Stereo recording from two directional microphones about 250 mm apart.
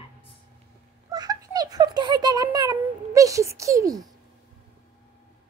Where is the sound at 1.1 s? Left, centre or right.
Centre.